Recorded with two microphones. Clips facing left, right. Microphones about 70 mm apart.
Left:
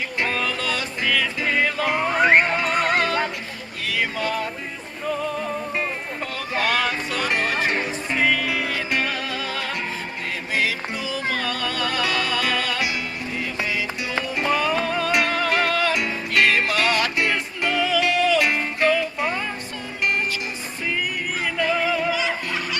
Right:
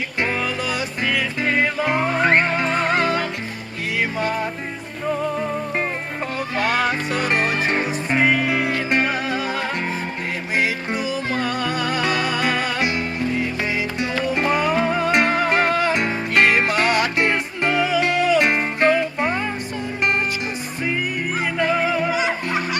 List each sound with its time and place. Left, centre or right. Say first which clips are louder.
0.2 s music: right 2 dB; centre
4.2 s music: right 2 dB; right
14.3 s music: right 2 dB; right
21.6 s music: right 2 dB; right